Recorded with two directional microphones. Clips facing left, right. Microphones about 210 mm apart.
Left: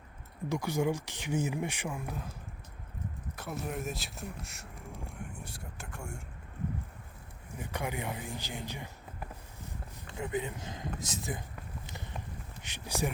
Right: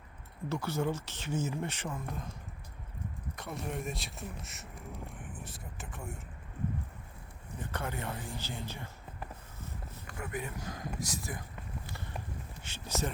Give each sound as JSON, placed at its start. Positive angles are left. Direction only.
{"t": 0.4, "sound": "speech", "side_deg": 15}
{"t": 3.3, "sound": "speech", "side_deg": 5}
{"t": 7.6, "sound": "speech", "side_deg": 15}
{"t": 10.1, "sound": "speech", "side_deg": 20}
{"t": 12.6, "sound": "speech", "side_deg": 15}